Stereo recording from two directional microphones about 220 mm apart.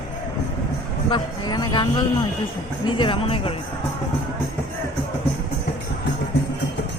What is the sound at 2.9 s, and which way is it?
Speech, 25° left (ahead or behind).